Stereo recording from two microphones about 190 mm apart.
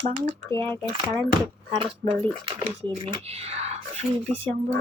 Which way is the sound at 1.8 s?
30° right (ahead or behind).